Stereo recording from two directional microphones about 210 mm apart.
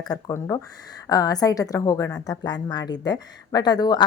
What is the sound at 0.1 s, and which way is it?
A woman's voice, 15° left (ahead or behind).